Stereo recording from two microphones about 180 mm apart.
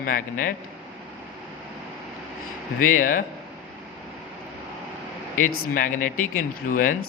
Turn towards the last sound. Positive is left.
turn(degrees=50)  # may be behind; listen again after turning